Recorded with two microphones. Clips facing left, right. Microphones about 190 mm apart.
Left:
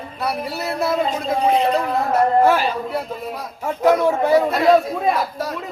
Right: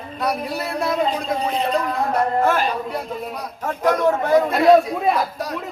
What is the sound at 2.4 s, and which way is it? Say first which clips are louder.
A man's voice: left 3 dB; 10° left (ahead or behind).